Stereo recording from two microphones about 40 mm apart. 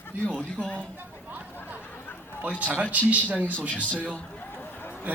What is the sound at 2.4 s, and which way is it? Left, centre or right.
A man's voice, right.